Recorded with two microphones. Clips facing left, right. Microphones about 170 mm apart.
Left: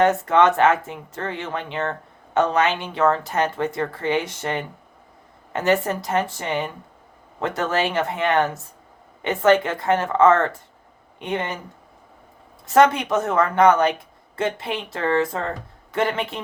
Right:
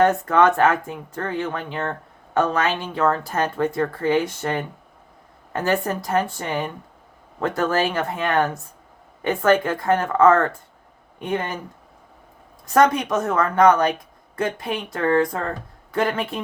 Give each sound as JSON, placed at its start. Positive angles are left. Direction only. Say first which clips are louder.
{"t": 0.0, "sound": "speech", "louder": "even", "side_deg": 20}
{"t": 12.6, "sound": "speech", "louder": "left 1 dB", "side_deg": 25}